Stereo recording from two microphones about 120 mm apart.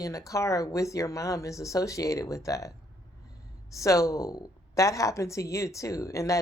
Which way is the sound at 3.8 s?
25° left (ahead or behind).